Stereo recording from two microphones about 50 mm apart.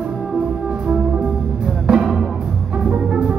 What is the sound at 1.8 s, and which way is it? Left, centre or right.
Music, centre.